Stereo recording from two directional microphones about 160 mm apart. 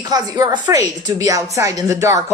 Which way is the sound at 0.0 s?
25° right (ahead or behind).